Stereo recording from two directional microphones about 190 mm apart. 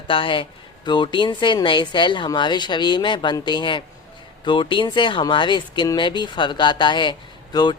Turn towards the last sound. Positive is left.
turn(degrees=20)  # may be behind; listen again after turning